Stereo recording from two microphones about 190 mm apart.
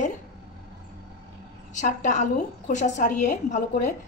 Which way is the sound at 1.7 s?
40° left (ahead or behind).